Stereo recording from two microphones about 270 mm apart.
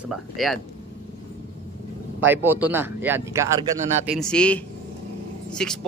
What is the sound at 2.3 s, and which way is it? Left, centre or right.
A man's voice, centre.